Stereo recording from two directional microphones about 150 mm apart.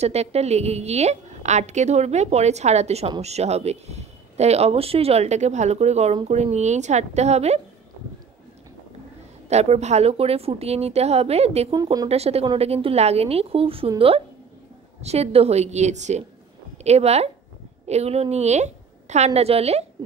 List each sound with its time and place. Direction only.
0.0 s a woman's voice: 45° right (ahead or behind)
9.5 s a woman's voice: 45° right (ahead or behind)
11.7 s speech: 25° right (ahead or behind)
12.1 s a woman's voice: 45° right (ahead or behind)